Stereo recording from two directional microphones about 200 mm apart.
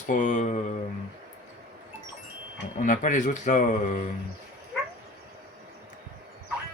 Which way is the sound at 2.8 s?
40° left (ahead or behind).